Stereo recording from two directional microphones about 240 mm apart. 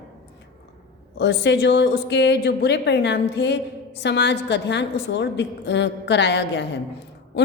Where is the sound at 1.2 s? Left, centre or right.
Left.